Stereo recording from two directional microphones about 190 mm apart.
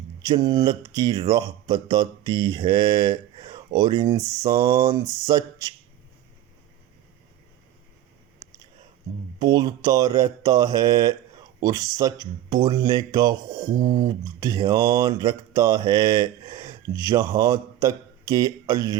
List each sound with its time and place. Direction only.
0.2 s speech: 20° right (ahead or behind)
9.4 s speech: 20° right (ahead or behind)
13.7 s speech: 40° right (ahead or behind)
14.3 s speech: 20° right (ahead or behind)